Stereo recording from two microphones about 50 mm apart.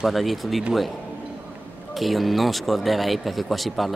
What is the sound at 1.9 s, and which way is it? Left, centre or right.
Speech, centre.